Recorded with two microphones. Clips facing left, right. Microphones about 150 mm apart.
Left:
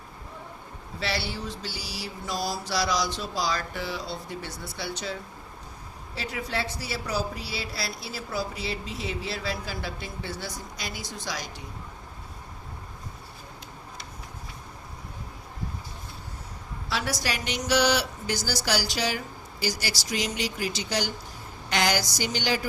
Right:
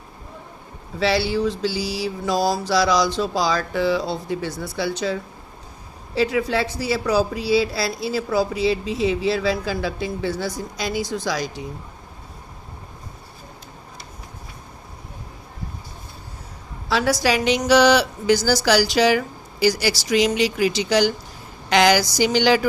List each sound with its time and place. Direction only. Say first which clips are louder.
0.9 s speech: right 12 dB; 90° right
6.1 s speech: right 12 dB; 90° right
16.9 s speech: right 11 dB; 90° right